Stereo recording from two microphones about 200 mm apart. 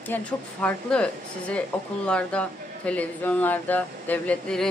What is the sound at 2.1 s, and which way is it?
Speech, 5° left (ahead or behind).